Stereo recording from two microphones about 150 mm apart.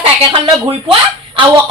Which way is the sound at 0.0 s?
35° right (ahead or behind).